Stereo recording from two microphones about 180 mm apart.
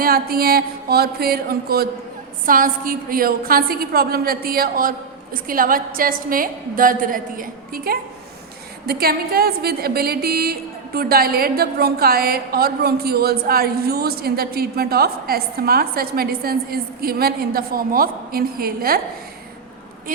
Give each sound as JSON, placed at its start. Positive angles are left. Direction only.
{"t": 0.0, "sound": "a woman's voice", "side_deg": -55}